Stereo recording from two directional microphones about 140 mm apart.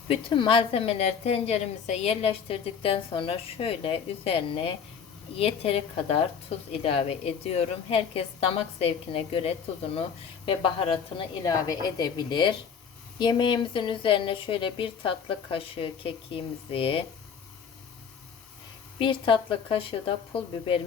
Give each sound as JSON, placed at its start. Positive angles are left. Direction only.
{"t": 0.1, "sound": "a woman's voice", "side_deg": 40}
{"t": 11.4, "sound": "a woman's voice", "side_deg": 25}
{"t": 18.9, "sound": "speech", "side_deg": 40}